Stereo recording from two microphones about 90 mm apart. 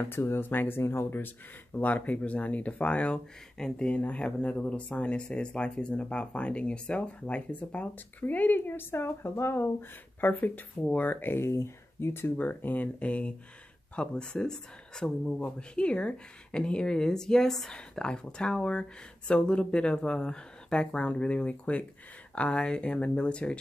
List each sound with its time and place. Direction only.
0.0 s speech: 25° left (ahead or behind)